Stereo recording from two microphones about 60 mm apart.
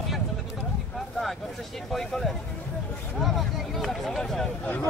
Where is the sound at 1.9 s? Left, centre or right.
Centre.